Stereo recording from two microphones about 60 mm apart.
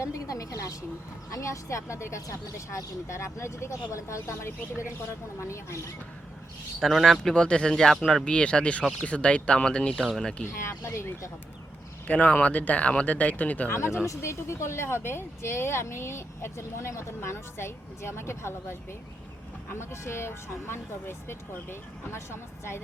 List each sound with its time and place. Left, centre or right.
0.0 s a sound: left
1.3 s speech: left
6.7 s speech: centre
7.2 s speech: centre
8.8 s speech: centre
9.0 s speech: centre
9.9 s speech: centre
10.6 s speech: left
12.0 s speech: left
13.7 s speech: left